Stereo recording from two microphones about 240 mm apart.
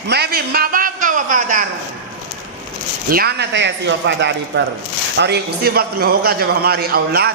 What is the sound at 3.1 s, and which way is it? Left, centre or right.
A man's voice, right.